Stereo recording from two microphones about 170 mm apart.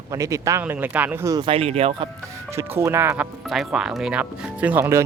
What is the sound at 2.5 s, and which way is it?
Speech, 15° right (ahead or behind).